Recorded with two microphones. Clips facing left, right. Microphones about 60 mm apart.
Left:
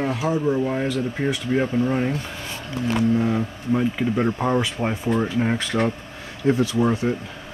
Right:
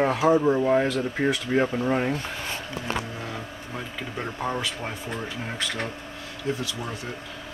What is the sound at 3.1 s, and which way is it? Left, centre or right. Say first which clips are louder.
Speech: left 13 dB; centre.